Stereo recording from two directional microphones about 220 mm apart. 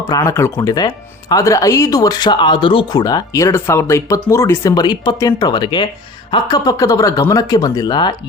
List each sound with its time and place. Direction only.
0.1 s speech: 15° left (ahead or behind)